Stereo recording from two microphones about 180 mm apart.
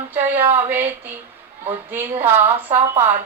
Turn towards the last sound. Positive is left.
turn(degrees=-15)  # may be behind; listen again after turning